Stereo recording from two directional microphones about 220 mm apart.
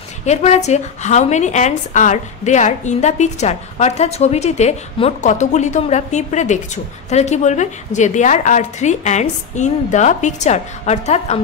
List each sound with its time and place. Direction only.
0.2 s a woman's voice: 30° left (ahead or behind)